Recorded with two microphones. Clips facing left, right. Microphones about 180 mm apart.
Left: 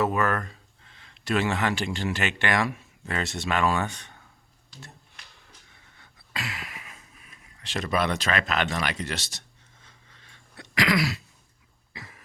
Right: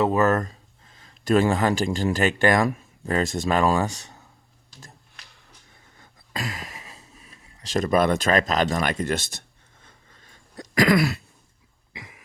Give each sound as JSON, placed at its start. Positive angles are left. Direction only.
{"t": 0.0, "sound": "speech", "side_deg": -35}
{"t": 6.0, "sound": "a sound", "side_deg": -45}
{"t": 7.8, "sound": "speech", "side_deg": -45}
{"t": 9.8, "sound": "throat clearing", "side_deg": -45}
{"t": 11.9, "sound": "cough", "side_deg": -15}